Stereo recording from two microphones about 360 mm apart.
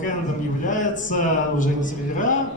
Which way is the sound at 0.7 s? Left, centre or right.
Left.